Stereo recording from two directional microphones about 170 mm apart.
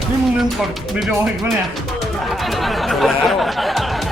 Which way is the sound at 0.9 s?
5° right (ahead or behind).